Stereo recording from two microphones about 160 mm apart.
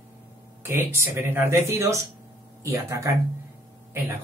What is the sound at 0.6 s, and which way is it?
Speech, 15° right (ahead or behind).